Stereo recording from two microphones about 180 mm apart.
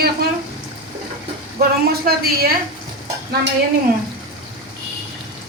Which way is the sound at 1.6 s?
55° right (ahead or behind).